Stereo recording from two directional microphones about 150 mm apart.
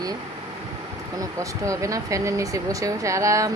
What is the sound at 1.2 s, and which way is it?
Speech, 20° right (ahead or behind).